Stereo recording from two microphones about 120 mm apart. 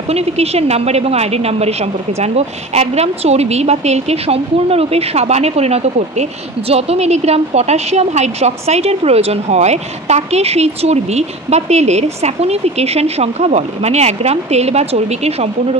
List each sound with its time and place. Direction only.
0.1 s a woman's voice: 60° right (ahead or behind)